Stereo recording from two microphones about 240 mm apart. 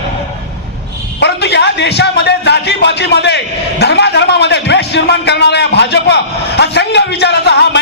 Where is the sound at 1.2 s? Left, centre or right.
Left.